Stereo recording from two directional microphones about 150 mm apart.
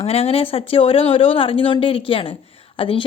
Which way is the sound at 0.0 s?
40° left (ahead or behind).